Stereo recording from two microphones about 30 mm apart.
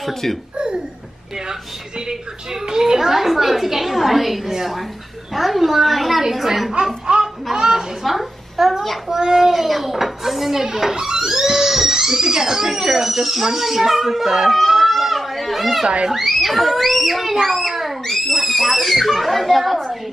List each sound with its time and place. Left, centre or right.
0.0 s speech: centre
2.0 s a woman's voice: right
7.5 s a woman's voice: centre
8.0 s a woman's voice: centre
9.7 s a woman's voice: centre
14.5 s children playing: centre
16.1 s a child's voice: centre